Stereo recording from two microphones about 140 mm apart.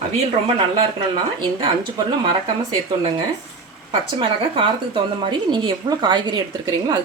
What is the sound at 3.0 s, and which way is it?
Speech, 40° right (ahead or behind).